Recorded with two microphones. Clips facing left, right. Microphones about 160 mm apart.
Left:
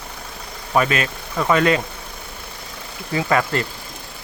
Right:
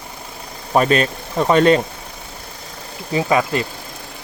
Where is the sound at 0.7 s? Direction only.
35° right (ahead or behind).